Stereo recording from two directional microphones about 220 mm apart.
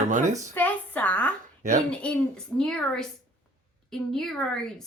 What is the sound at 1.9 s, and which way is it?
A woman's voice, 5° left (ahead or behind).